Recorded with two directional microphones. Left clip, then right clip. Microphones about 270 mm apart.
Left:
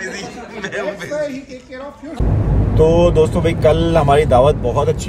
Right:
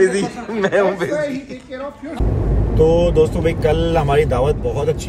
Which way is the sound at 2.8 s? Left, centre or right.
Centre.